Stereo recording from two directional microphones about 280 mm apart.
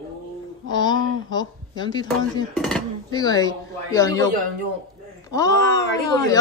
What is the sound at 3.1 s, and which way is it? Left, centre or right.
Speech, centre.